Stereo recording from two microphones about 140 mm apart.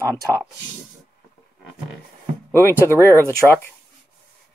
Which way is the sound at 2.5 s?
15° left (ahead or behind).